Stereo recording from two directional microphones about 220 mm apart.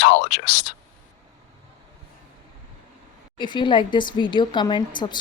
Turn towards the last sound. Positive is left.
turn(degrees=20)  # may be behind; listen again after turning